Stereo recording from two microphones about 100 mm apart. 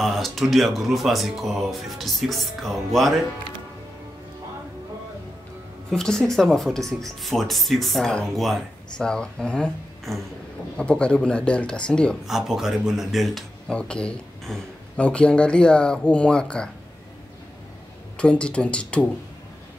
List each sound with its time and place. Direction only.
0.0 s speech: centre (ahead or behind)
5.9 s speech: 5° left (ahead or behind)
12.3 s speech: 5° right (ahead or behind)
18.1 s speech: 10° left (ahead or behind)